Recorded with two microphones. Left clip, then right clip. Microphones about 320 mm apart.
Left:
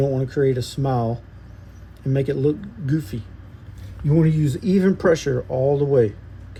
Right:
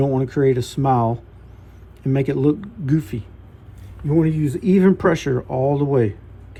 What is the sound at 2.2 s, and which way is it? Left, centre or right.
Speech, centre.